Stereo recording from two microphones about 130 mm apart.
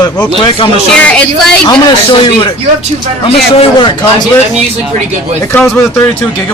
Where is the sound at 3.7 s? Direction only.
35° left (ahead or behind).